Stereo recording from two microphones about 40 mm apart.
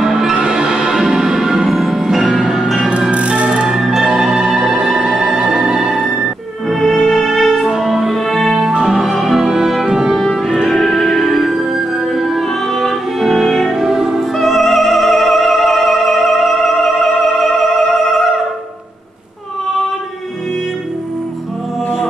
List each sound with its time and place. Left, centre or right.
0.0 s music: centre
1.7 s music: centre
3.1 s music: right
3.6 s music: centre
6.7 s music: centre
8.7 s music: centre
10.7 s music: centre
14.3 s music: centre